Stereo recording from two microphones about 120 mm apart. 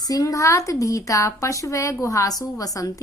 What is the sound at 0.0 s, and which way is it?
A woman's voice, 30° left (ahead or behind).